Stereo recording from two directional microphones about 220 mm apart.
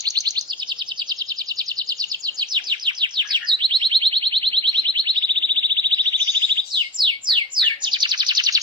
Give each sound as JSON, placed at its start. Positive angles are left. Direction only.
{"t": 0.0, "sound": "chirp", "side_deg": -15}
{"t": 2.4, "sound": "bird", "side_deg": -20}